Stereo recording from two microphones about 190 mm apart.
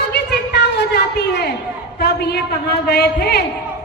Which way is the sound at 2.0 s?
60° left (ahead or behind).